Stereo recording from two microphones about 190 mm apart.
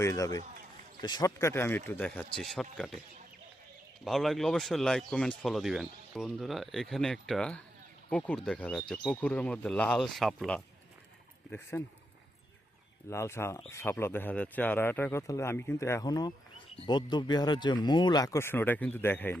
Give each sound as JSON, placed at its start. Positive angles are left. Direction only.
{"t": 0.0, "sound": "speech", "side_deg": 15}
{"t": 4.0, "sound": "speech", "side_deg": 0}
{"t": 11.7, "sound": "speech", "side_deg": 15}
{"t": 13.1, "sound": "speech", "side_deg": 15}